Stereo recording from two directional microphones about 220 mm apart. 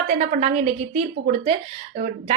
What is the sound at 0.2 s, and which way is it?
Speech, 30° right (ahead or behind).